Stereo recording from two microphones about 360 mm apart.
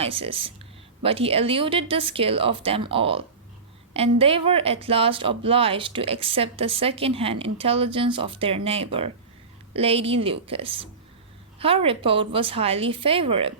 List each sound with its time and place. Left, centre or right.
0.0 s speech: centre